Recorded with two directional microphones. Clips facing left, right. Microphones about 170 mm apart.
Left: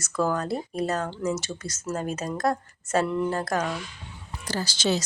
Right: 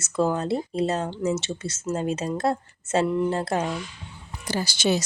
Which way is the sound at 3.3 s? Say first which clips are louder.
Right 2 dB; 25° right (ahead or behind).